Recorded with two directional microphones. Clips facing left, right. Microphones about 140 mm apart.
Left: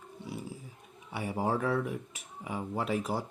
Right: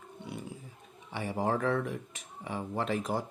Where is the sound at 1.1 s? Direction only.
10° left (ahead or behind).